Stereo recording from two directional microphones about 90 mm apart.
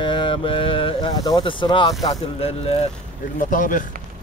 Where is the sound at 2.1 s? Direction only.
90° left.